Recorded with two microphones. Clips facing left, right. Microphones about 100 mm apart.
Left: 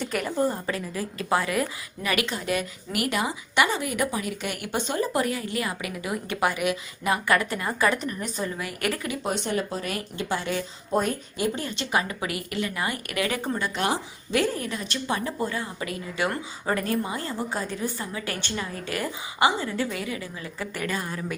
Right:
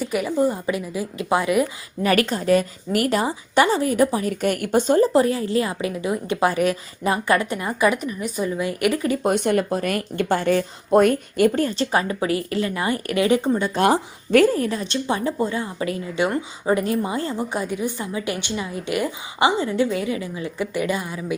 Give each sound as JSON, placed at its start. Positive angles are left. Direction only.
{"t": 0.0, "sound": "a woman's voice", "side_deg": -5}
{"t": 2.0, "sound": "a woman's voice", "side_deg": -40}
{"t": 5.1, "sound": "a woman's voice", "side_deg": -30}
{"t": 6.5, "sound": "a woman's voice", "side_deg": -35}
{"t": 7.1, "sound": "a woman's voice", "side_deg": -25}
{"t": 8.5, "sound": "a woman's voice", "side_deg": -20}
{"t": 9.2, "sound": "a woman's voice", "side_deg": -55}
{"t": 11.7, "sound": "a woman's voice", "side_deg": -35}
{"t": 13.7, "sound": "a woman's voice", "side_deg": -45}